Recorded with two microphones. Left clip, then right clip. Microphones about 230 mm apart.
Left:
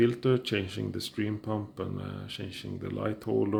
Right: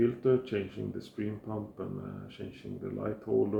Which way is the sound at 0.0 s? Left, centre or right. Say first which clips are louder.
Left 1 dB; left.